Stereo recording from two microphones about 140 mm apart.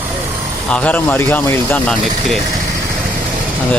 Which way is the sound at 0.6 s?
10° left (ahead or behind).